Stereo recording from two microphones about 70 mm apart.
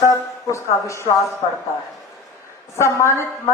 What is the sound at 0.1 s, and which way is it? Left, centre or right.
Speech, left.